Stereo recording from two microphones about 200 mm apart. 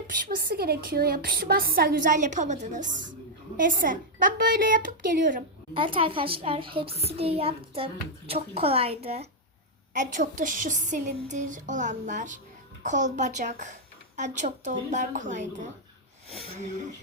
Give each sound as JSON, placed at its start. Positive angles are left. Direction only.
{"t": 0.3, "sound": "a woman's voice", "side_deg": -50}
{"t": 5.7, "sound": "a woman's voice", "side_deg": -25}